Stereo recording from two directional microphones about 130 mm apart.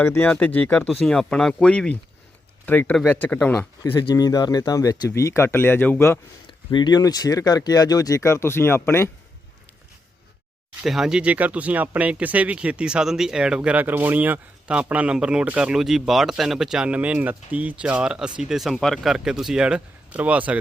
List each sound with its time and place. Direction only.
0.1 s speech: 10° left (ahead or behind)
0.9 s speech: centre (ahead or behind)
3.9 s speech: 35° left (ahead or behind); by 6.1 s 15° left (ahead or behind)
6.7 s speech: 35° left (ahead or behind); by 9.0 s 20° left (ahead or behind)
10.8 s speech: 5° right (ahead or behind)